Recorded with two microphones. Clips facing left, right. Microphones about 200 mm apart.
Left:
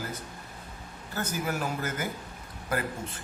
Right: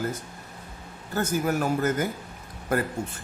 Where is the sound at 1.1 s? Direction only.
50° right (ahead or behind).